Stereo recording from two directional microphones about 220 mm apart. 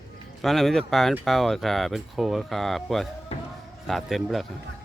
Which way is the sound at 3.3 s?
25° left (ahead or behind).